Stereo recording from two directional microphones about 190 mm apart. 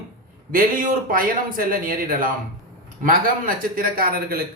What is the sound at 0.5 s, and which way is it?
A man's voice, 45° right (ahead or behind).